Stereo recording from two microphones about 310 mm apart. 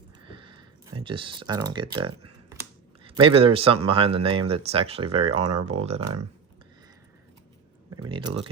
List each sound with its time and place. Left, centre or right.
0.3 s a sound: centre
3.2 s speech: centre
7.9 s speech: centre